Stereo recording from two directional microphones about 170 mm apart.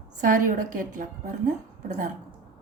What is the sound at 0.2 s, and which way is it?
A woman's voice, 50° right (ahead or behind).